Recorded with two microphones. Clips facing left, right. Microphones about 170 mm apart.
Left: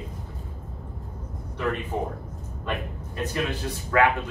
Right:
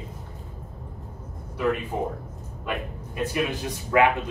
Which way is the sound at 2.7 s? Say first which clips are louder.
Even; 10° right (ahead or behind).